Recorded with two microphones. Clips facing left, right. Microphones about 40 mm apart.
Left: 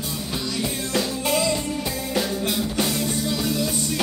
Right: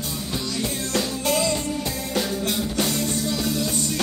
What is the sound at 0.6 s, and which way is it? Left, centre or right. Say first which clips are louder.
Music: left 1 dB; centre.